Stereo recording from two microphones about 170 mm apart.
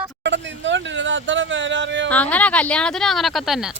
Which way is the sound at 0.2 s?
90° right.